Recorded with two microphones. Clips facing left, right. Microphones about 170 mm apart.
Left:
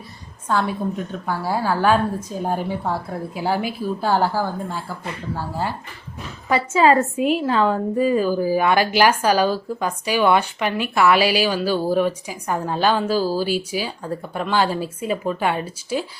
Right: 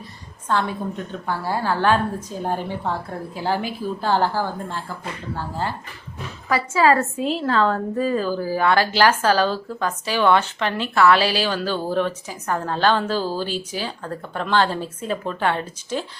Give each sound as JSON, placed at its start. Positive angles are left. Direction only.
{"t": 0.4, "sound": "a woman's voice", "side_deg": 10}
{"t": 6.5, "sound": "a woman's voice", "side_deg": 20}